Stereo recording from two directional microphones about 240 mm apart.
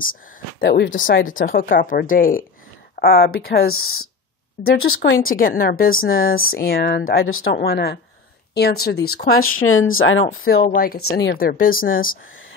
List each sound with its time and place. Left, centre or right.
0.6 s speech: left
5.2 s speech: left
7.2 s speech: left
7.5 s speech: left
9.6 s speech: left
10.2 s speech: left